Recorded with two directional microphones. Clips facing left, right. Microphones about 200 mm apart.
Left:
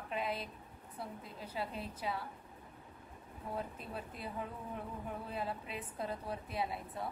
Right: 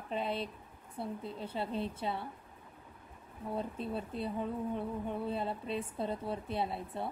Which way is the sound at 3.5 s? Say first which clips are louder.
Right 6 dB; 30° right (ahead or behind).